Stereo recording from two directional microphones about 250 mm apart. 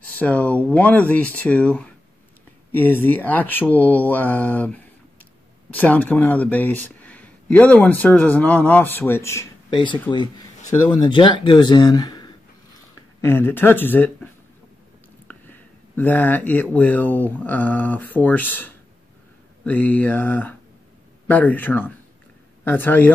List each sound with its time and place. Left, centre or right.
0.0 s speech: centre
15.3 s a sound: centre
16.0 s speech: centre